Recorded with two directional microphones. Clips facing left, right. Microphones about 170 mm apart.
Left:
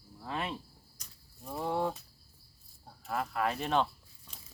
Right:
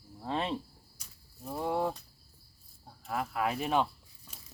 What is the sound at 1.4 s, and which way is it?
Speech, centre (ahead or behind).